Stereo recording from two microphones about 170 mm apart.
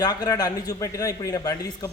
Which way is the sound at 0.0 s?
20° left (ahead or behind).